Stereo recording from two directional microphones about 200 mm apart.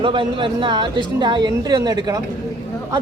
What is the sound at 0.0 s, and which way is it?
A woman's voice, 25° right (ahead or behind).